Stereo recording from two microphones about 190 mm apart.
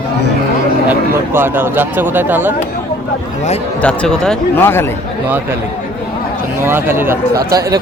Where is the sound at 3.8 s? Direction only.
5° left (ahead or behind).